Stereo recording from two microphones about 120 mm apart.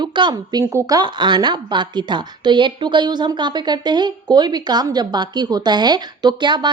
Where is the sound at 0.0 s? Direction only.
40° right (ahead or behind).